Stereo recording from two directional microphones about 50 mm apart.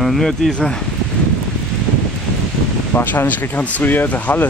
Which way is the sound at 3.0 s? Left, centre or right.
Left.